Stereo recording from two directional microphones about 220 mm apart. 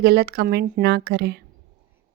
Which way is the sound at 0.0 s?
50° right (ahead or behind).